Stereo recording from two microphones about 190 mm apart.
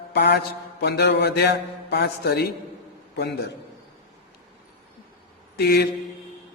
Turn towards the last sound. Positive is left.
turn(degrees=60)  # may be behind; listen again after turning